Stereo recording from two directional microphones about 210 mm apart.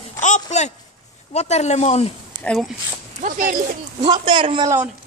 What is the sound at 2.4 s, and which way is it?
Speech, centre (ahead or behind).